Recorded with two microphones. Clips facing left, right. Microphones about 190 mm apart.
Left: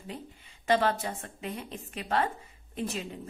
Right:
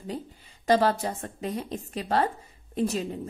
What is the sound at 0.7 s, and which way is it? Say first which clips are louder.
A woman's voice: right 4 dB; 40° right (ahead or behind).